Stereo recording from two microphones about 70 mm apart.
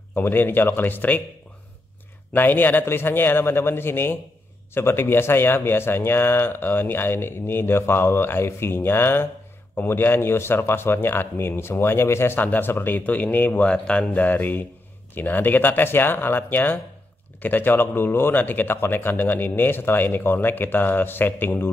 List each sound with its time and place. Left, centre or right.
0.1 s speech: left
2.3 s speech: left
14.2 s speech: left